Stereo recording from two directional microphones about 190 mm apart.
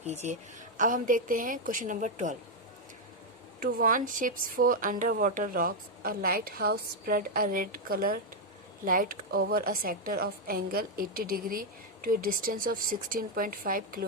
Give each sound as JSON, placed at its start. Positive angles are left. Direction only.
{"t": 0.0, "sound": "a woman's voice", "side_deg": -35}
{"t": 3.6, "sound": "speech", "side_deg": -45}